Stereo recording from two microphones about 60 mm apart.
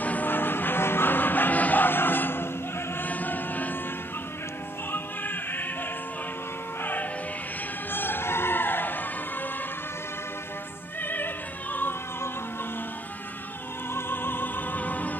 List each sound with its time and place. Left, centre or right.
0.0 s music: left
3.0 s chant: left
4.9 s music: left
6.8 s music: left
11.0 s opera: left
13.9 s music: left